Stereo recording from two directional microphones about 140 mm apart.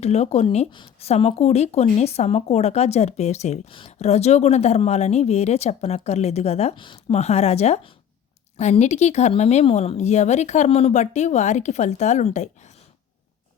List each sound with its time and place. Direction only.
0.0 s a woman's voice: 50° left (ahead or behind)
3.7 s a woman's voice: 40° left (ahead or behind)